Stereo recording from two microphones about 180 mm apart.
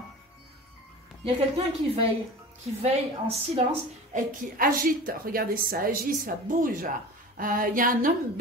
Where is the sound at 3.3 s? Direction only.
35° right (ahead or behind).